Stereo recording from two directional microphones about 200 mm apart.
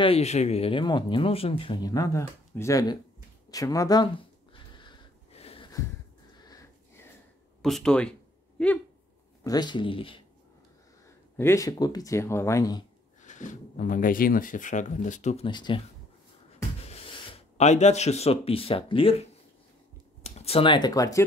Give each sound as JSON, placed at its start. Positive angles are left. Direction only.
{"t": 0.0, "sound": "speech", "side_deg": 30}
{"t": 4.7, "sound": "a sound", "side_deg": 25}
{"t": 6.4, "sound": "sniff", "side_deg": 20}
{"t": 7.6, "sound": "speech", "side_deg": 5}
{"t": 9.4, "sound": "speech", "side_deg": 20}
{"t": 11.3, "sound": "speech", "side_deg": 15}
{"t": 13.2, "sound": "speech", "side_deg": 40}
{"t": 15.4, "sound": "speech", "side_deg": 25}
{"t": 16.9, "sound": "speech", "side_deg": 30}
{"t": 20.2, "sound": "speech", "side_deg": 30}